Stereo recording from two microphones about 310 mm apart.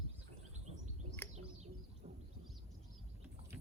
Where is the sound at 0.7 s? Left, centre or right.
Right.